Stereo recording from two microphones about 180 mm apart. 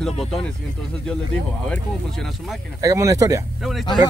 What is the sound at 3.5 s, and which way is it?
Speech, centre (ahead or behind).